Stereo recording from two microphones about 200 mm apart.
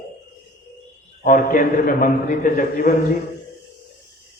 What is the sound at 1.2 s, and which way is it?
A man's voice, 45° left (ahead or behind).